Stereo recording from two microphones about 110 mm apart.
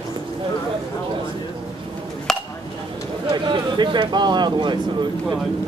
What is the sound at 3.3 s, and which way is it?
Speech, 45° right (ahead or behind).